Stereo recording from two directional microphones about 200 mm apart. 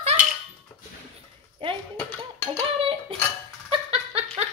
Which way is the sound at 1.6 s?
25° right (ahead or behind).